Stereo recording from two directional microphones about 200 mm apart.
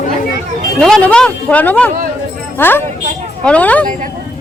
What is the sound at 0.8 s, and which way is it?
Speech, 5° left (ahead or behind).